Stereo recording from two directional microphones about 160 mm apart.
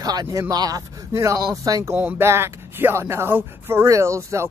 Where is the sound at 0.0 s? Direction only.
25° right (ahead or behind).